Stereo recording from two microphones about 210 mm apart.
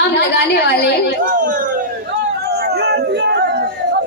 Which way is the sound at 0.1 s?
50° left (ahead or behind).